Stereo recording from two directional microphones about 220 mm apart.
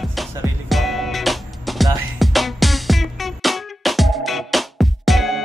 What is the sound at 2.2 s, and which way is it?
Music, centre (ahead or behind).